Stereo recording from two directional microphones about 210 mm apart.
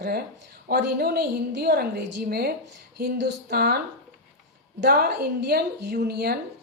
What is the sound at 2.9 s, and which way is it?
Speech, 50° right (ahead or behind).